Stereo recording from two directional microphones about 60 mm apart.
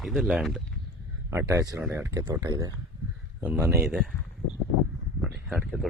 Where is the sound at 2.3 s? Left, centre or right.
Right.